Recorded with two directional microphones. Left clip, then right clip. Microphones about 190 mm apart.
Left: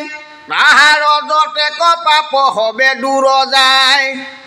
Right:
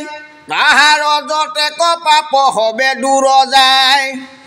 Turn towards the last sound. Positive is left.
turn(degrees=-35)  # may be behind; listen again after turning